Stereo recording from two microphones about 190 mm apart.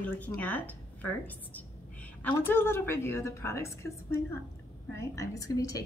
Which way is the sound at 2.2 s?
10° left (ahead or behind).